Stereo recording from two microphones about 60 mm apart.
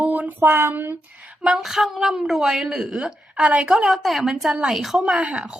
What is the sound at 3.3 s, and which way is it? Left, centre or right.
Speech, centre.